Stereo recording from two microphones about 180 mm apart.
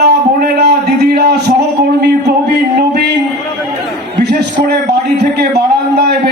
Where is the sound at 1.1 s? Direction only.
65° right (ahead or behind).